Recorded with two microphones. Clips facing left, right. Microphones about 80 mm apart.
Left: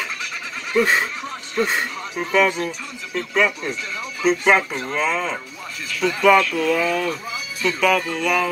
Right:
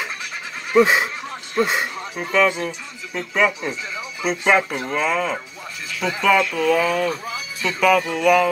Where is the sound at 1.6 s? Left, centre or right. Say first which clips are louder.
Right 1 dB; centre.